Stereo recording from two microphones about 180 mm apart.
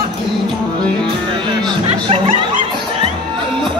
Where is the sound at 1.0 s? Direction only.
25° right (ahead or behind).